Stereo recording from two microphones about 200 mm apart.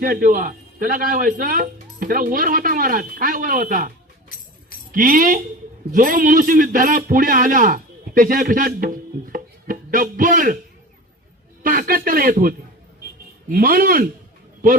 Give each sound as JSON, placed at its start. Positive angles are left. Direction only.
{"t": 0.0, "sound": "a man's voice", "side_deg": -45}
{"t": 11.6, "sound": "a man's voice", "side_deg": -45}